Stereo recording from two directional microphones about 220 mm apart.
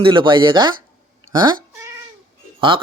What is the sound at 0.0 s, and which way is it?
Speech, 20° right (ahead or behind).